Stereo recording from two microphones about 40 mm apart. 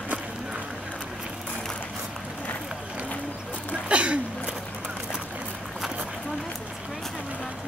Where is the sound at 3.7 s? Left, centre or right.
Right.